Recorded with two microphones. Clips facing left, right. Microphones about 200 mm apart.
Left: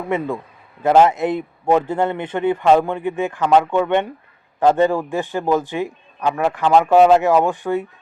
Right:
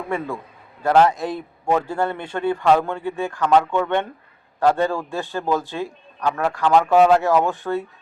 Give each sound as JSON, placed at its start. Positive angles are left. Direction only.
{"t": 0.1, "sound": "a man's voice", "side_deg": 20}